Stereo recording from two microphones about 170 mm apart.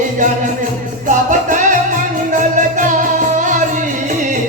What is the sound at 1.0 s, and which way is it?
Music, 50° right (ahead or behind).